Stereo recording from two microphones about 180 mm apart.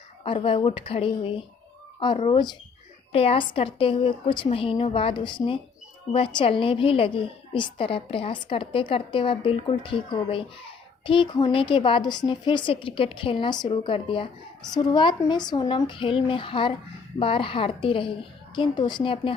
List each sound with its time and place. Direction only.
0.3 s a woman's voice: 30° left (ahead or behind)